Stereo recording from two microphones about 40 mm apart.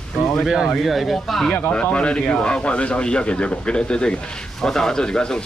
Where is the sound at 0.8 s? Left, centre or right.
Centre.